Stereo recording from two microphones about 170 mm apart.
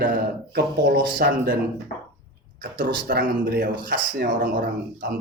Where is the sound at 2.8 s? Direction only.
55° right (ahead or behind).